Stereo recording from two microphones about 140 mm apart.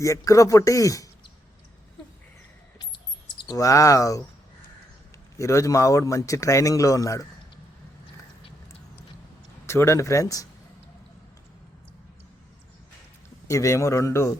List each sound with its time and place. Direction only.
0.0 s a man's voice: 25° left (ahead or behind)
3.3 s a man's voice: 30° left (ahead or behind)
5.4 s a man's voice: 20° left (ahead or behind)
9.6 s a man's voice: 20° left (ahead or behind)
13.5 s a man's voice: 20° left (ahead or behind)